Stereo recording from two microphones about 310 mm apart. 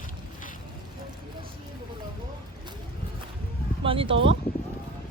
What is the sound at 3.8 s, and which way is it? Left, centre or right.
Speech, centre.